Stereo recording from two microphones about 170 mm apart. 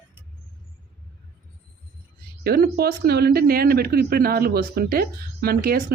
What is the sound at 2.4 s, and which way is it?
Speech, 65° right (ahead or behind).